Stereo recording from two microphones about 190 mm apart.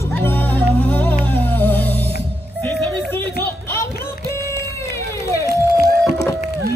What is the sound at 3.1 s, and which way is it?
Music, 10° left (ahead or behind).